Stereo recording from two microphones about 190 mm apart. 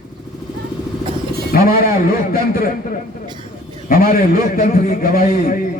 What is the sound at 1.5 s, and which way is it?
A man's voice, 50° left (ahead or behind).